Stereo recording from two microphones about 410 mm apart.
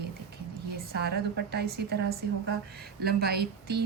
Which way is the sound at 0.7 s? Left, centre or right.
Right.